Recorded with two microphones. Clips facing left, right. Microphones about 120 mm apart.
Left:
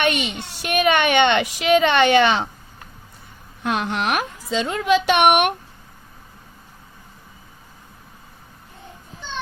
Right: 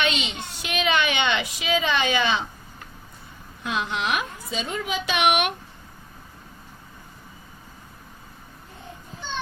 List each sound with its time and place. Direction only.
0.0 s a child's voice: 60° left (ahead or behind)
3.6 s a child's voice: 60° left (ahead or behind)